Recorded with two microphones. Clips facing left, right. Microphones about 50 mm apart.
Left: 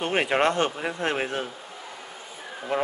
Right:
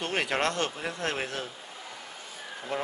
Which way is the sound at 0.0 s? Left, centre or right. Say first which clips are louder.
Left 6 dB; left.